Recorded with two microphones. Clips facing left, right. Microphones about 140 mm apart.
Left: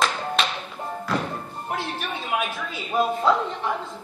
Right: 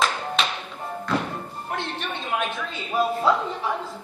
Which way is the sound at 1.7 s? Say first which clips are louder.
Left 1 dB; 5° left (ahead or behind).